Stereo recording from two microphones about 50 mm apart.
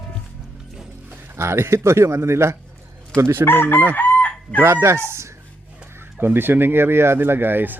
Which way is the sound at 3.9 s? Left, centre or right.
Left.